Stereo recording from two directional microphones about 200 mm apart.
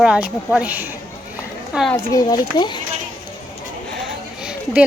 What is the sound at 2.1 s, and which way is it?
Speech, 20° left (ahead or behind).